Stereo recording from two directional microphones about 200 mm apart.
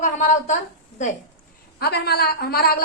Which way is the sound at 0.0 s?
35° left (ahead or behind).